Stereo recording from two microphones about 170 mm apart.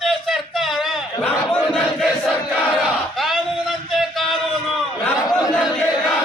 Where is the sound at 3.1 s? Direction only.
Centre (ahead or behind).